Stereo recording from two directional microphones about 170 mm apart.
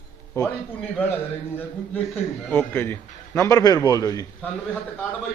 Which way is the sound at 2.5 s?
10° left (ahead or behind).